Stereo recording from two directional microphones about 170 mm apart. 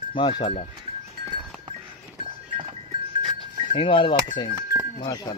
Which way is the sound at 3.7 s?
30° left (ahead or behind).